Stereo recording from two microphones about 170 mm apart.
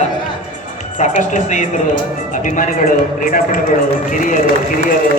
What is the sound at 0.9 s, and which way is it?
A woman's voice, 45° left (ahead or behind).